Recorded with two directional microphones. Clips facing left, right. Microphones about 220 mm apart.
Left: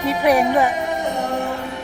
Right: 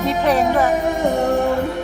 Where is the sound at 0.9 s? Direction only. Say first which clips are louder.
Right 5 dB; 50° right (ahead or behind).